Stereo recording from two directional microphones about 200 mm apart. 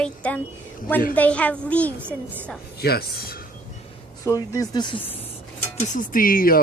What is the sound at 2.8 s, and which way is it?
Speech, 50° left (ahead or behind).